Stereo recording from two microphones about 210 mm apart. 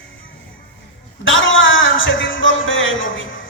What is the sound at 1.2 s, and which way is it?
Speech, 65° left (ahead or behind).